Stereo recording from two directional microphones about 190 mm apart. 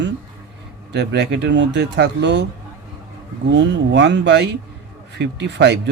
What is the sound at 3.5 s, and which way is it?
Speech, 65° right (ahead or behind).